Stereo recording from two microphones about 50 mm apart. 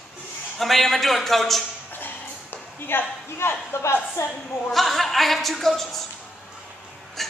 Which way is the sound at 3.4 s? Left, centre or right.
Left.